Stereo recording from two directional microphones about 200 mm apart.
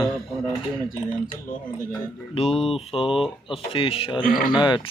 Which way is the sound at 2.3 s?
30° left (ahead or behind).